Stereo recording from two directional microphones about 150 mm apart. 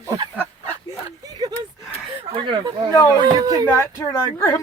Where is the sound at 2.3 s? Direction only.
30° right (ahead or behind).